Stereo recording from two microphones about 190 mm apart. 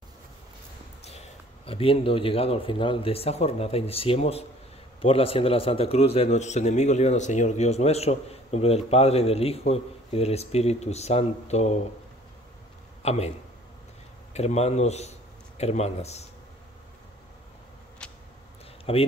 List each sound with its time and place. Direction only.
1.7 s a man's voice: 30° left (ahead or behind)
13.0 s speech: 35° left (ahead or behind)
14.3 s speech: 35° left (ahead or behind)
18.9 s a man's voice: 30° left (ahead or behind)